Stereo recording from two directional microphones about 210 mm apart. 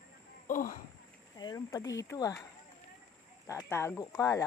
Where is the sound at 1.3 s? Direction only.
20° left (ahead or behind).